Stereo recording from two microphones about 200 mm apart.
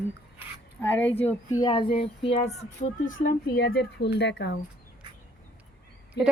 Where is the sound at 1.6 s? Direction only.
25° left (ahead or behind).